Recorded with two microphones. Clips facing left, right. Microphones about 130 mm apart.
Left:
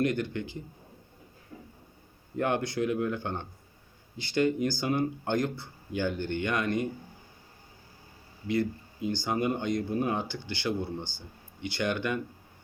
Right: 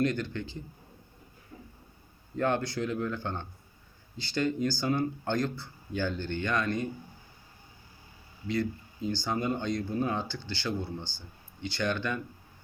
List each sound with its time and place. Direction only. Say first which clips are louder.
0.0 s speech: left 1 dB; 20° left (ahead or behind)
2.3 s speech: even; 20° left (ahead or behind)
8.4 s speech: left 2 dB; 20° left (ahead or behind)